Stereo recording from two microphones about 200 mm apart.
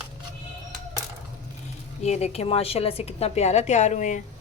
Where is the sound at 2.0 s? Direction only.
30° left (ahead or behind).